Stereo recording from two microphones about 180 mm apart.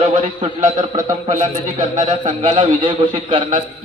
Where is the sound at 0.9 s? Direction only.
45° right (ahead or behind).